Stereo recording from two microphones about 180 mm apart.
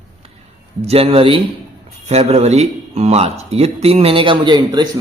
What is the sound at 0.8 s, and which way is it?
A man's voice, 35° right (ahead or behind).